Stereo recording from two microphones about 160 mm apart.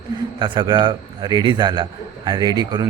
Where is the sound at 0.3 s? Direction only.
30° right (ahead or behind).